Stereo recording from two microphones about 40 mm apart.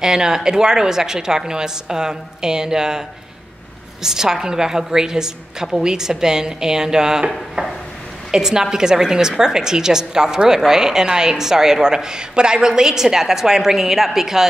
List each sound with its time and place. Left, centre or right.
0.0 s a woman's voice: centre